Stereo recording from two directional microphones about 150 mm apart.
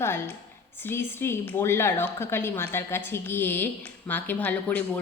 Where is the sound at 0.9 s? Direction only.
15° left (ahead or behind).